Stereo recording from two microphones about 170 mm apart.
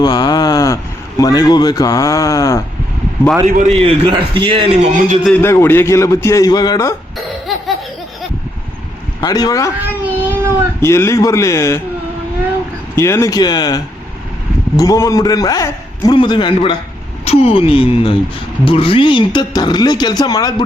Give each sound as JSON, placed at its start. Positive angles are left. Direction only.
{"t": 0.0, "sound": "a sound", "side_deg": 25}
{"t": 1.2, "sound": "speech", "side_deg": 20}
{"t": 3.4, "sound": "a man's voice", "side_deg": -45}
{"t": 5.2, "sound": "a man's voice", "side_deg": 10}
{"t": 9.2, "sound": "speech", "side_deg": 20}
{"t": 9.7, "sound": "speech", "side_deg": -10}
{"t": 10.8, "sound": "a man's voice", "side_deg": 15}
{"t": 13.0, "sound": "speech", "side_deg": 15}